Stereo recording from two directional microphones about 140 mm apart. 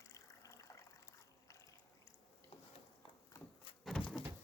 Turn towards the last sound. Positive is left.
turn(degrees=0)  # may be behind; listen again after turning